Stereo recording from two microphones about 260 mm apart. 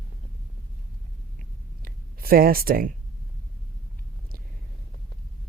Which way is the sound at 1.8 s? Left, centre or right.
Right.